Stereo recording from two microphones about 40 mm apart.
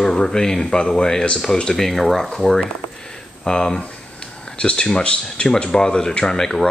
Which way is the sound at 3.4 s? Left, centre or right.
Centre.